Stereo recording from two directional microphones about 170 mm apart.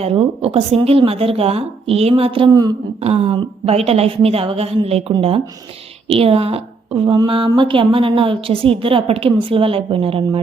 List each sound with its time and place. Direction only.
0.0 s a woman's voice: 35° right (ahead or behind)
3.0 s a woman's voice: 35° right (ahead or behind)